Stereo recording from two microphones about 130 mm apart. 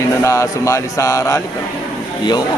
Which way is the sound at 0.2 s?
25° left (ahead or behind).